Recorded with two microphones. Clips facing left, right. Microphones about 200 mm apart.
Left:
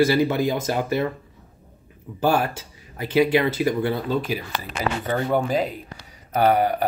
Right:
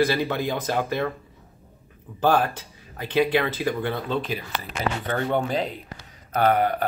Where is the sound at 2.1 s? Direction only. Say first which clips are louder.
Even; 10° left (ahead or behind).